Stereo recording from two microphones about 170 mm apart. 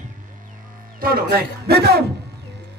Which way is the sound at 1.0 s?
65° right (ahead or behind).